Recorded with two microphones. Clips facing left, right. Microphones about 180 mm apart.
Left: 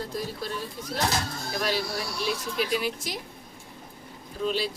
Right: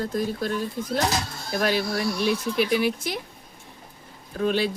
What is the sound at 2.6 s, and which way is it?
Speech, 65° right (ahead or behind).